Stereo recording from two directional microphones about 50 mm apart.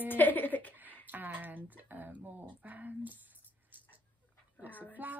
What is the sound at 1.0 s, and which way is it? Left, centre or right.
Speech, right.